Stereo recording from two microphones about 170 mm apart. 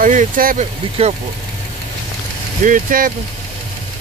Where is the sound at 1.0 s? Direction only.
35° right (ahead or behind).